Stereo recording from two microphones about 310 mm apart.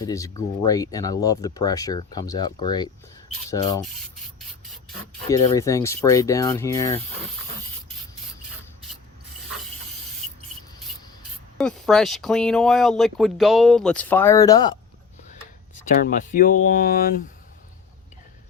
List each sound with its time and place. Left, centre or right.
0.0 s speech: centre
5.3 s speech: centre
11.5 s speech: centre
15.7 s speech: left